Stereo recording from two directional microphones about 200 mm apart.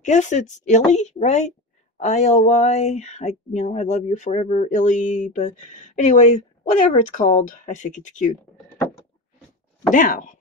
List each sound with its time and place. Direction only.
0.0 s speech: 35° left (ahead or behind)
9.9 s speech: 40° left (ahead or behind)